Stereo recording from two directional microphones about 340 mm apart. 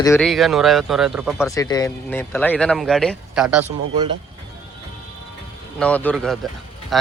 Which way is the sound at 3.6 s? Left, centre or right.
Centre.